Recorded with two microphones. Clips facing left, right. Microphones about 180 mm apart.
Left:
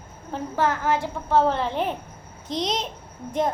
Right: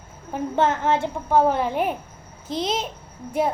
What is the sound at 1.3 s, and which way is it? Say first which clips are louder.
A woman's voice: right 2 dB; 10° right (ahead or behind).